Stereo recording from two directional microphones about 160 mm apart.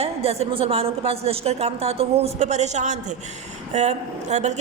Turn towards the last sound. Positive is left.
turn(degrees=-45)  # may be behind; listen again after turning